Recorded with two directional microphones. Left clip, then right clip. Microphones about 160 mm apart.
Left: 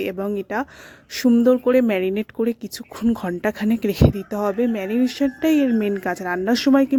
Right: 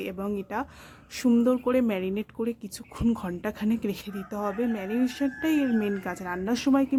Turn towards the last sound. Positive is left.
turn(degrees=30)  # may be behind; listen again after turning